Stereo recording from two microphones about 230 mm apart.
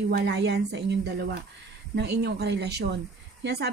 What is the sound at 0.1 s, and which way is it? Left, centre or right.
A woman's voice, right.